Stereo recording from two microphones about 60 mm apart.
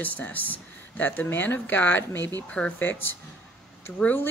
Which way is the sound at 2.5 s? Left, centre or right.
Left.